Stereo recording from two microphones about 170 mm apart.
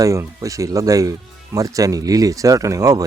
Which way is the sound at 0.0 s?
20° right (ahead or behind).